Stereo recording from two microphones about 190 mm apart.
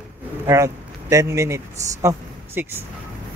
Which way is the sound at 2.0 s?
10° right (ahead or behind).